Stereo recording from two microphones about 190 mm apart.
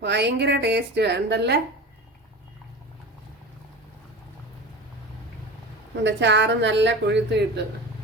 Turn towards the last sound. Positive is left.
turn(degrees=-65)  # may be behind; listen again after turning